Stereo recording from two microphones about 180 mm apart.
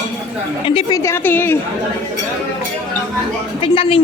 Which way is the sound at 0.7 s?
30° left (ahead or behind).